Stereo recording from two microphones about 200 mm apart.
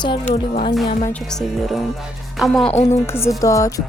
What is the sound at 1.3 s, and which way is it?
Speech, centre (ahead or behind).